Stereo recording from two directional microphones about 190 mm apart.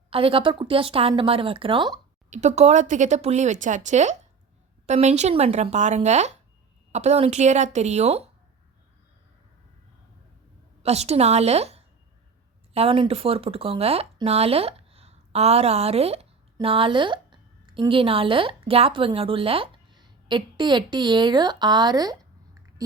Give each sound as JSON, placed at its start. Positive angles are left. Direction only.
{"t": 0.1, "sound": "a woman's voice", "side_deg": -30}
{"t": 2.3, "sound": "speech", "side_deg": -35}
{"t": 10.8, "sound": "a woman's voice", "side_deg": -35}